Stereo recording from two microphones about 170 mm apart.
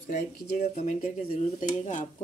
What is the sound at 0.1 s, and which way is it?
Speech, 50° left (ahead or behind).